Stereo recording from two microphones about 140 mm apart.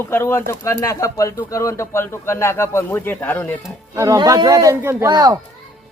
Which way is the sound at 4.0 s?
25° right (ahead or behind).